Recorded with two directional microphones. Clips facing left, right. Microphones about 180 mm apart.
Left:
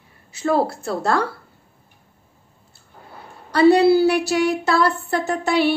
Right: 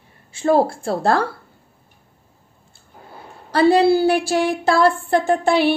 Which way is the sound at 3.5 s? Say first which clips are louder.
Left 1 dB; 30° right (ahead or behind).